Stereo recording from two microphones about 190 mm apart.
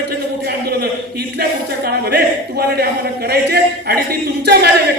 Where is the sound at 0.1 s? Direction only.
55° right (ahead or behind).